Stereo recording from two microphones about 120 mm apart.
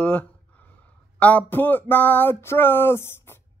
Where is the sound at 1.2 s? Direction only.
10° left (ahead or behind).